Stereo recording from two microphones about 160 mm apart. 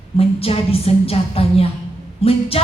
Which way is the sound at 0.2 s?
35° left (ahead or behind).